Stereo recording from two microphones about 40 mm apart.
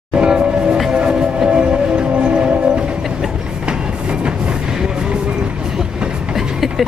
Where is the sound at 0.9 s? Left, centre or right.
Right.